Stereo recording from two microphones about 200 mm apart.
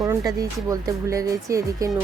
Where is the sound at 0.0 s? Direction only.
15° right (ahead or behind).